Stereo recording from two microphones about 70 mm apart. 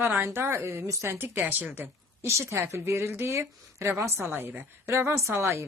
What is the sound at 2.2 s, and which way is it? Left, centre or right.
Speech, right.